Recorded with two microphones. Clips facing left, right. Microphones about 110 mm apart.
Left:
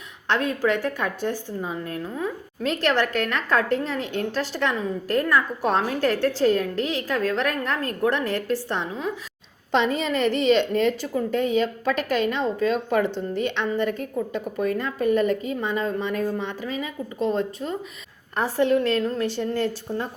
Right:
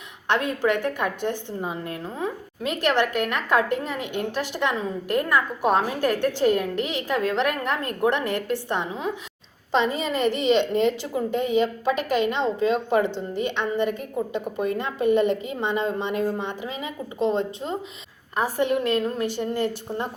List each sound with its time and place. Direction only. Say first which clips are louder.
0.3 s a woman's voice: even; 20° right (ahead or behind)
2.6 s a woman's voice: even; 15° right (ahead or behind)
9.7 s a woman's voice: left 1 dB; 5° right (ahead or behind)
14.8 s a woman's voice: right 2 dB; 20° right (ahead or behind)
18.3 s a woman's voice: left 2 dB; 15° right (ahead or behind)